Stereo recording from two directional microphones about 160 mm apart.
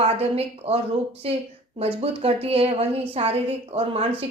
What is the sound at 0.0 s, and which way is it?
A woman's voice, 40° right (ahead or behind).